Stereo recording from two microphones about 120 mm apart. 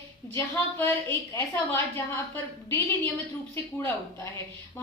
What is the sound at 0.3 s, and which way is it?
A woman's voice, 20° left (ahead or behind).